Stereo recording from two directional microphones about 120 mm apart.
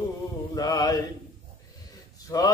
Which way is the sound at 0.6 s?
30° left (ahead or behind).